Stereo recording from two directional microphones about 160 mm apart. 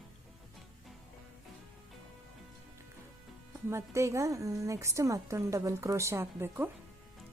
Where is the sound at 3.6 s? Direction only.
20° right (ahead or behind).